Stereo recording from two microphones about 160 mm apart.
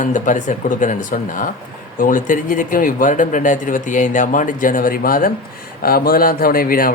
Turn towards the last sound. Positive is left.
turn(degrees=65)  # may be behind; listen again after turning